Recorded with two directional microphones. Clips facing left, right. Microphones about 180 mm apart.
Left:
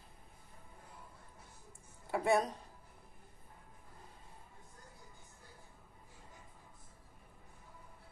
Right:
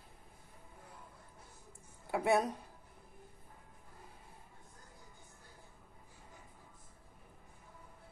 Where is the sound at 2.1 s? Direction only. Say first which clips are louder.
Even; 5° right (ahead or behind).